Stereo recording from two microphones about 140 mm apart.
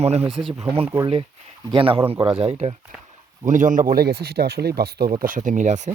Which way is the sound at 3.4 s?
65° right (ahead or behind).